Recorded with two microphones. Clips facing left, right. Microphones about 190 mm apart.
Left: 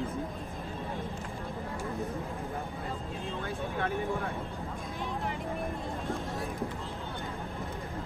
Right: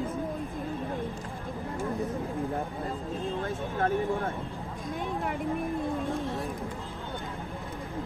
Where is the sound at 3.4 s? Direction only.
40° right (ahead or behind).